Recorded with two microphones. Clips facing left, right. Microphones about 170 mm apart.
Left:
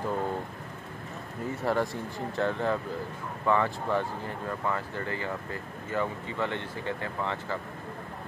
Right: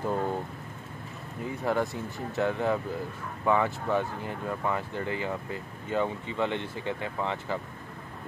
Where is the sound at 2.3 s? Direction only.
10° right (ahead or behind).